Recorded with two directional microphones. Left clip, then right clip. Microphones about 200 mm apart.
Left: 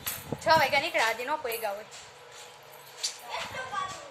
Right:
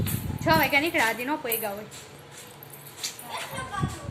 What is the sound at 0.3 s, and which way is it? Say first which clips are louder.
A woman's voice: right 1 dB; 10° left (ahead or behind).